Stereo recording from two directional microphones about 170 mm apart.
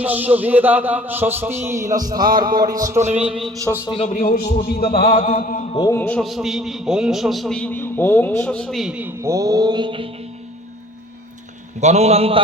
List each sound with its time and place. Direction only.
0.0 s speech: 10° right (ahead or behind)
3.0 s a man's voice: 40° right (ahead or behind)
3.8 s a man's voice: 35° left (ahead or behind)
5.7 s a man's voice: 20° left (ahead or behind); by 10.1 s 30° right (ahead or behind)
11.8 s a man's voice: 40° right (ahead or behind)